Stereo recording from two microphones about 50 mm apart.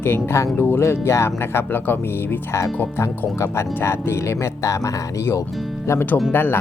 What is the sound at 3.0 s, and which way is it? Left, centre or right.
Speech, left.